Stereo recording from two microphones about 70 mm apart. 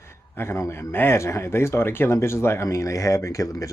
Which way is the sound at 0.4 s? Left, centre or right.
Left.